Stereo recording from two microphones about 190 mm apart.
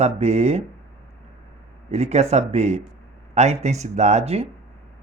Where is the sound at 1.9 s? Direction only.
35° right (ahead or behind).